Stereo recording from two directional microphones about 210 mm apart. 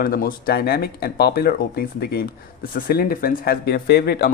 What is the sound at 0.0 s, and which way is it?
Speech, 45° left (ahead or behind).